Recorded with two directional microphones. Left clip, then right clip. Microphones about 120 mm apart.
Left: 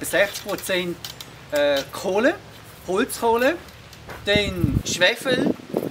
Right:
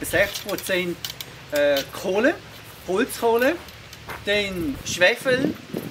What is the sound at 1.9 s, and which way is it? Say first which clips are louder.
Speech: left 1 dB; 20° left (ahead or behind).